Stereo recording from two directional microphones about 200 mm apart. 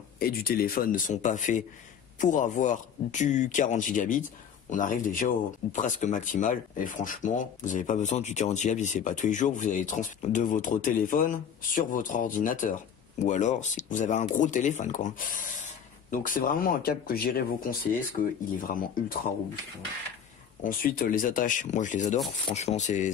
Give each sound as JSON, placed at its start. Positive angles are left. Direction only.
{"t": 0.2, "sound": "speech", "side_deg": 50}
{"t": 20.6, "sound": "speech", "side_deg": 45}